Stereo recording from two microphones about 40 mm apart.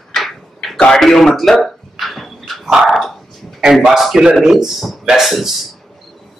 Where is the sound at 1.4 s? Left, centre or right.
Centre.